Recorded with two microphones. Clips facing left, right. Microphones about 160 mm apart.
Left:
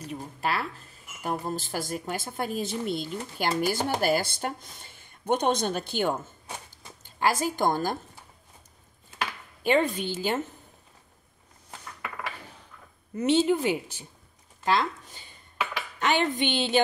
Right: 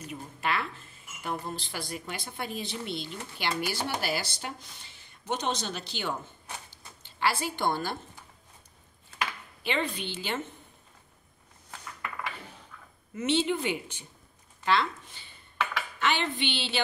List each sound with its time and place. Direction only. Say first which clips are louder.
0.0 s a woman's voice: left 3 dB; 35° left (ahead or behind)
9.6 s a woman's voice: left 7 dB; 45° left (ahead or behind)
13.1 s a woman's voice: left 5 dB; 40° left (ahead or behind)